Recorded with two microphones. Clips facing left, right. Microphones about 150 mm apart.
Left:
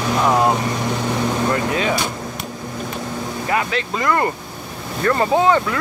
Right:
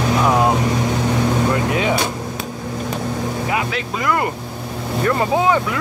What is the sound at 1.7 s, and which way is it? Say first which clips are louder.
Speech: right 1 dB; 15° right (ahead or behind).